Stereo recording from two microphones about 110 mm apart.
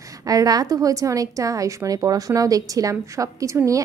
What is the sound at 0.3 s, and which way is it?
A woman's voice, 35° right (ahead or behind).